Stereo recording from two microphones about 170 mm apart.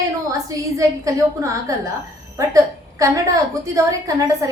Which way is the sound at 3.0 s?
20° right (ahead or behind).